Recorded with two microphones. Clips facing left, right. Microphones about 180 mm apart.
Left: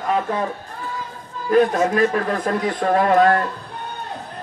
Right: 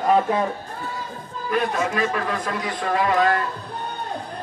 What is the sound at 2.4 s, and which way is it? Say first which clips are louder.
A man's voice: left 6 dB; 50° left (ahead or behind).